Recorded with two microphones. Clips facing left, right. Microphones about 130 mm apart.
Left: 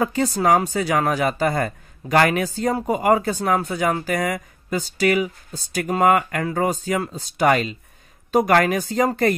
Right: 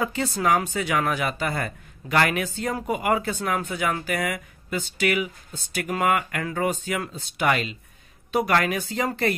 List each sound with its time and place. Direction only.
0.0 s speech: 40° left (ahead or behind)